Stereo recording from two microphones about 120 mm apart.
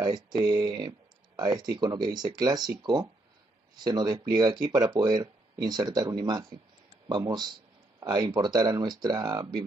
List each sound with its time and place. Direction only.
0.0 s speech: 35° right (ahead or behind)